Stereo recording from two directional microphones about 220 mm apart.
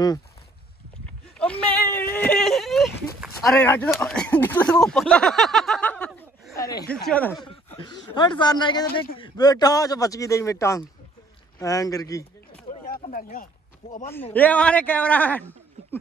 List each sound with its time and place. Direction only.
1.4 s whimper: 5° left (ahead or behind)
3.2 s speech: 5° left (ahead or behind)
7.4 s a man's voice: 20° left (ahead or behind)
12.8 s a sound: 40° left (ahead or behind)
14.0 s speech: 10° left (ahead or behind)